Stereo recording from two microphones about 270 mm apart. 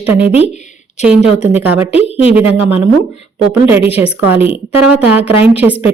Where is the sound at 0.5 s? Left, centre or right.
Left.